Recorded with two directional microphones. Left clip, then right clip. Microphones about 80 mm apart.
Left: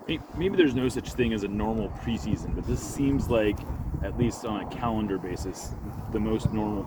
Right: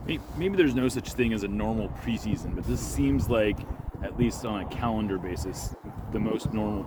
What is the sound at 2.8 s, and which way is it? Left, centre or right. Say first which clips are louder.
Speech: right 1 dB; right.